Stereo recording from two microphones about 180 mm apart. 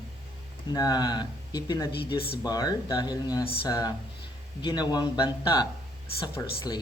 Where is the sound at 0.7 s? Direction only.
20° left (ahead or behind).